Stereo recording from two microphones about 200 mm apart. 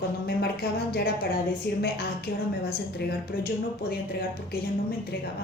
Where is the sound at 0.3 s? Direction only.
50° left (ahead or behind).